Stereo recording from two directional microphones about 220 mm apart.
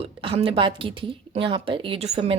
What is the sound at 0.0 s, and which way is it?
A woman's voice, 25° right (ahead or behind).